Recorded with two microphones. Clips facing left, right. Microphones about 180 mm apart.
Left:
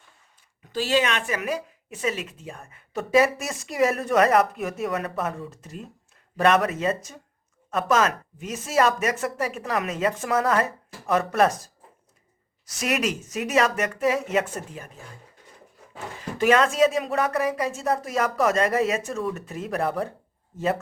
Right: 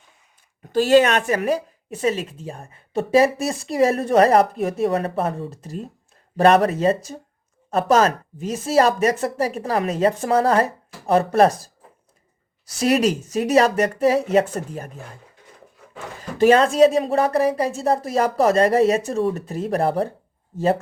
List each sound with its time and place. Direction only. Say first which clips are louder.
0.6 s speech: right 9 dB; 50° right (ahead or behind)
16.4 s speech: right 5 dB; 30° right (ahead or behind)